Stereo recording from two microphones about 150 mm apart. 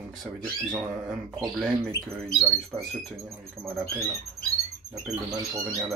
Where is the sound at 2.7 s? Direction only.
20° right (ahead or behind).